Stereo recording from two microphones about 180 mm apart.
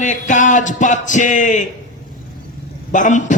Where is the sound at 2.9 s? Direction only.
45° left (ahead or behind).